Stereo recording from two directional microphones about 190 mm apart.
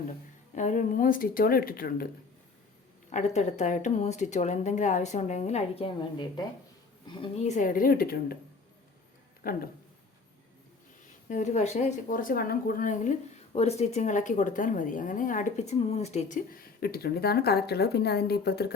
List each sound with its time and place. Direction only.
0.5 s speech: 40° left (ahead or behind)
3.1 s speech: 40° left (ahead or behind)
7.4 s speech: 40° left (ahead or behind)
9.4 s speech: 50° left (ahead or behind)
11.3 s speech: 40° left (ahead or behind); by 18.7 s 55° left (ahead or behind)